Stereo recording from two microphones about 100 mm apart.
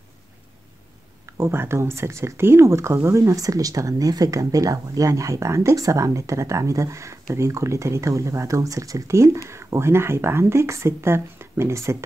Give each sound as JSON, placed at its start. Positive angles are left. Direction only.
{"t": 1.2, "sound": "speech", "side_deg": -25}